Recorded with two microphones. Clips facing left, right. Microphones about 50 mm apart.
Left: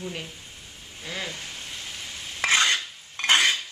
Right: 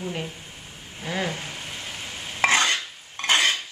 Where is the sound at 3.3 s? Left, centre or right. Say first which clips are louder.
Even; right.